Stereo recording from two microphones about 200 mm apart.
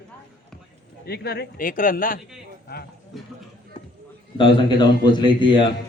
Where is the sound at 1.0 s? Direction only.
55° left (ahead or behind).